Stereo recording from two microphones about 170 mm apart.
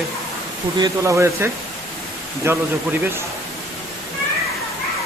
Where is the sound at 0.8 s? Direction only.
20° right (ahead or behind).